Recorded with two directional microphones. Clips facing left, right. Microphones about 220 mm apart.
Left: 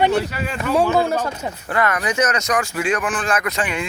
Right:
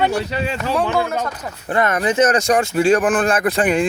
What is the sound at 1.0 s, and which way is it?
Speech, 30° left (ahead or behind).